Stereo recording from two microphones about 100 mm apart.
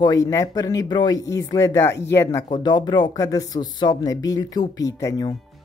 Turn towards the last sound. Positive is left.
turn(degrees=35)  # may be behind; listen again after turning